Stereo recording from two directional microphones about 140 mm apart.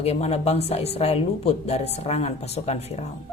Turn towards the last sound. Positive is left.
turn(degrees=50)  # may be behind; listen again after turning